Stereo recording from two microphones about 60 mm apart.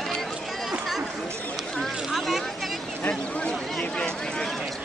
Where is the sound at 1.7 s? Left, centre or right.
Centre.